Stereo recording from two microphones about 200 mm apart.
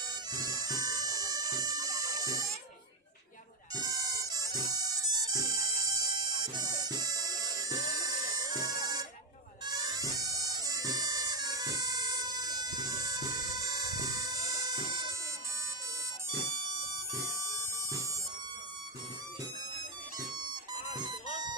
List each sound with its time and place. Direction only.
0.1 s bagpipes: 20° right (ahead or behind)
3.8 s music: 15° right (ahead or behind)
9.6 s bagpipes: 20° right (ahead or behind)
17.1 s a sound: 15° right (ahead or behind)
20.9 s music: 20° right (ahead or behind)